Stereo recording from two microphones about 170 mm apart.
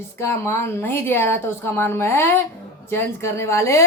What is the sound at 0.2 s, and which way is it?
A woman's voice, 15° left (ahead or behind).